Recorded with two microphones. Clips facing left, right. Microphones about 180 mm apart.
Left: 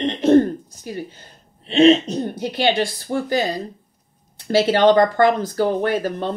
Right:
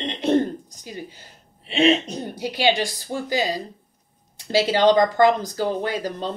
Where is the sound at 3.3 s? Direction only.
50° left (ahead or behind).